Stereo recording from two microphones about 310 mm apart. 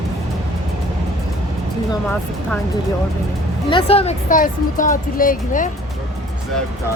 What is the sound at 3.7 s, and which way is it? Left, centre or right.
Speech, centre.